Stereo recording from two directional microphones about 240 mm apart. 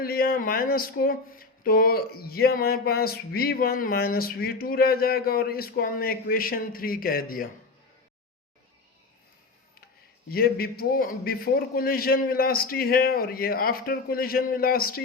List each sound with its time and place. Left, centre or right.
0.0 s speech: left
10.2 s speech: left